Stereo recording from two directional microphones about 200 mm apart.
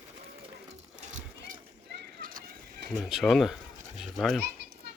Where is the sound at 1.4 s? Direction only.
45° right (ahead or behind).